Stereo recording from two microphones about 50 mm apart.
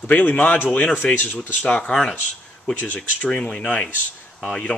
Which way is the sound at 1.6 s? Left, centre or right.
Left.